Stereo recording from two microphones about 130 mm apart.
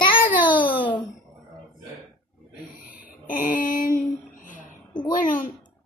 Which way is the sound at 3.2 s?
90° left.